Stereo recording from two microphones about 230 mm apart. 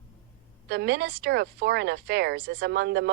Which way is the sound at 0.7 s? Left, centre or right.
Right.